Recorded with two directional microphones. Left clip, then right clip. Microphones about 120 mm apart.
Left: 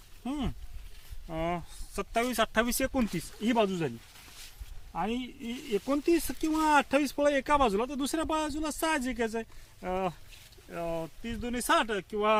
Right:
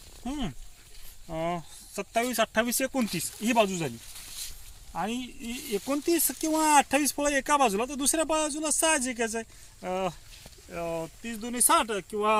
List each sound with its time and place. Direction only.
0.3 s speech: 10° right (ahead or behind)
6.1 s speech: 20° right (ahead or behind)
6.5 s speech: 40° right (ahead or behind); by 11.6 s 5° left (ahead or behind)
11.6 s speech: 20° left (ahead or behind)